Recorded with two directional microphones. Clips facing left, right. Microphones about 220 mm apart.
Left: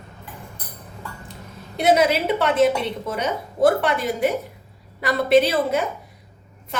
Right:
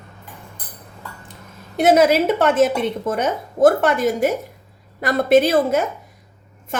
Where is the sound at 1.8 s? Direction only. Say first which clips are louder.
Right 4 dB; 50° right (ahead or behind).